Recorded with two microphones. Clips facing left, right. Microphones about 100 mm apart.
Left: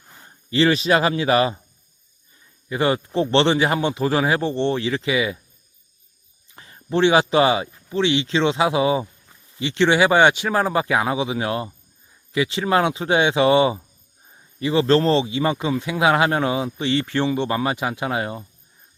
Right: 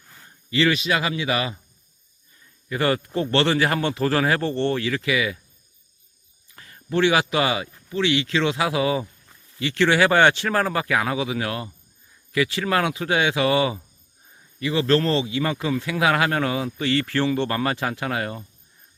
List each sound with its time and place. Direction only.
0.1 s speech: 30° left (ahead or behind)
2.6 s speech: 20° left (ahead or behind)
6.5 s speech: 25° left (ahead or behind)